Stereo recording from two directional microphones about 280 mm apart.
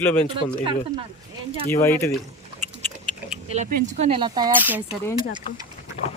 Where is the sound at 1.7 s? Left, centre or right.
Centre.